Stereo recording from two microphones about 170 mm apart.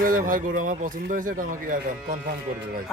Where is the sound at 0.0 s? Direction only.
55° right (ahead or behind).